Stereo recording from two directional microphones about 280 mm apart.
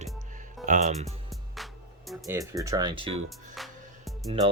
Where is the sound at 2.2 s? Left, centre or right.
Centre.